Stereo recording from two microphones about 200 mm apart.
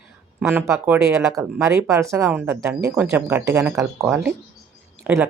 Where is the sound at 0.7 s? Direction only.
15° right (ahead or behind).